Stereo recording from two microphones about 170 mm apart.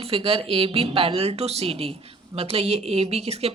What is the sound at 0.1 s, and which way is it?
Speech, 35° right (ahead or behind).